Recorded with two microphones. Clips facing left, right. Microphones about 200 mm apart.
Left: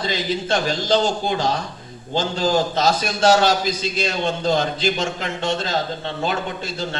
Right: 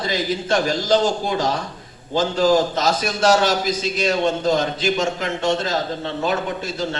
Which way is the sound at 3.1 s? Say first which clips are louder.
Even; 30° left (ahead or behind).